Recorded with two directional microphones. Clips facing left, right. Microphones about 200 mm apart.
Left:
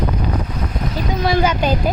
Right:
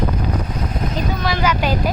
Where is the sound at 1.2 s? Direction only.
25° left (ahead or behind).